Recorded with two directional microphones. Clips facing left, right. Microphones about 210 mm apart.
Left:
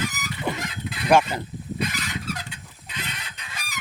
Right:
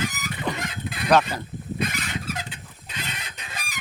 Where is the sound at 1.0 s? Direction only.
10° left (ahead or behind).